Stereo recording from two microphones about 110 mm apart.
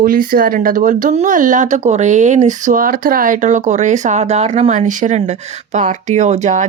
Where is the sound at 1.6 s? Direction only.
90° right.